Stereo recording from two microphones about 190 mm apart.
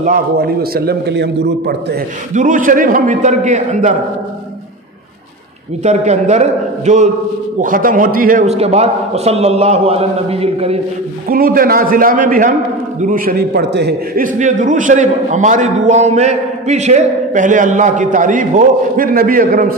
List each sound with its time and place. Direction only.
0.0 s a man's voice: 50° right (ahead or behind)
2.3 s a man's voice: 45° right (ahead or behind)
5.9 s a man's voice: 40° right (ahead or behind)
8.5 s a man's voice: 35° right (ahead or behind)
11.2 s a man's voice: 50° right (ahead or behind)
14.2 s a man's voice: 40° right (ahead or behind)